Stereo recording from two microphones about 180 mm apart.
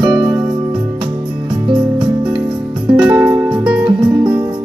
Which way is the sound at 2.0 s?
5° right (ahead or behind).